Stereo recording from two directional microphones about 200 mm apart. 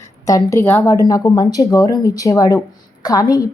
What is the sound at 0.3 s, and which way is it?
A woman's voice, 15° left (ahead or behind).